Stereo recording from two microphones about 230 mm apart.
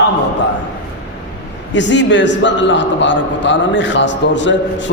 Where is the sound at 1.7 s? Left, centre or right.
Left.